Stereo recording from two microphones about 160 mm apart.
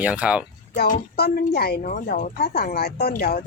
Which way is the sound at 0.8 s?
75° left (ahead or behind).